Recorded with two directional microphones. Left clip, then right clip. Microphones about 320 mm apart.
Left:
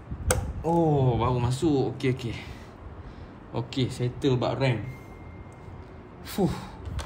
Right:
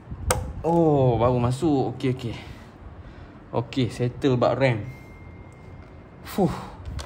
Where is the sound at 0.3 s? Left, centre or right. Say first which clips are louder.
Right 3 dB; centre.